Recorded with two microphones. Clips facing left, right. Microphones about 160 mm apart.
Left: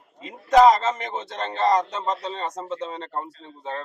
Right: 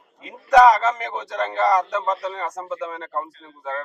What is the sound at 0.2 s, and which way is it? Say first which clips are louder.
A man's voice: right 2 dB; 25° left (ahead or behind).